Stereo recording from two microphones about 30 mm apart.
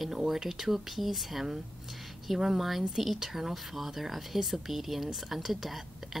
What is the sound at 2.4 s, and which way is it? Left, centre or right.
Speech, centre.